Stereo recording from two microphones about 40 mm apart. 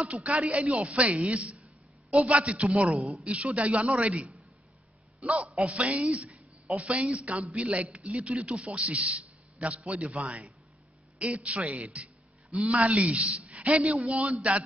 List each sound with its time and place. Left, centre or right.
0.0 s a man's voice: right